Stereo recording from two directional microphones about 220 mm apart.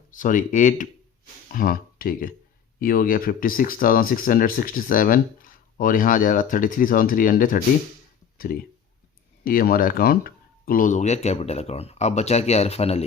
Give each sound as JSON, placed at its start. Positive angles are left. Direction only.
{"t": 0.1, "sound": "speech", "side_deg": 35}